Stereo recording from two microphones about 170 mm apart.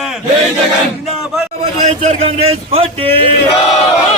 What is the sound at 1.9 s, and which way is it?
Speech, 35° right (ahead or behind).